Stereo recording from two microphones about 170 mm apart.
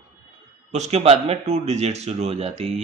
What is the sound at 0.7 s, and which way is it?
Speech, 40° right (ahead or behind).